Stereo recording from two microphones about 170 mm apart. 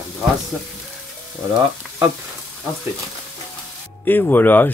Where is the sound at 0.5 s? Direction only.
Centre (ahead or behind).